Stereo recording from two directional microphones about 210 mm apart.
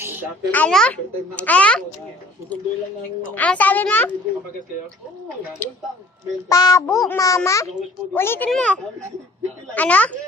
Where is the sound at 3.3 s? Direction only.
5° left (ahead or behind).